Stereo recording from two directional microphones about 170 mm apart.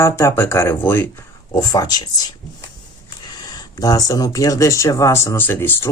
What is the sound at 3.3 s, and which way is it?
Speech, 25° left (ahead or behind).